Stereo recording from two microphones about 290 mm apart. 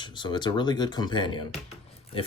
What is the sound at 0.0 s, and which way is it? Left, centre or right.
Speech, centre.